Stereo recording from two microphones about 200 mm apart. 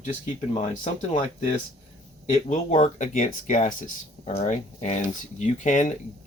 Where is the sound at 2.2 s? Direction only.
35° left (ahead or behind).